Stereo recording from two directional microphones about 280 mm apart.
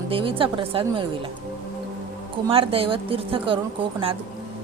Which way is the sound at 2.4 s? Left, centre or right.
Centre.